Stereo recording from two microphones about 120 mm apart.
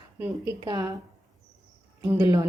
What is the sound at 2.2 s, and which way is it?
Speech, 30° right (ahead or behind).